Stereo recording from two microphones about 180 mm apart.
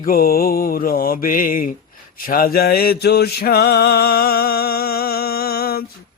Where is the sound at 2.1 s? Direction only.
55° left (ahead or behind).